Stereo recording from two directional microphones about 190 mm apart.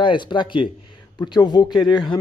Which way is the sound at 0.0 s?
25° left (ahead or behind).